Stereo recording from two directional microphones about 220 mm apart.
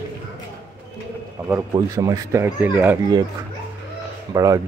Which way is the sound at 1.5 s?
15° right (ahead or behind).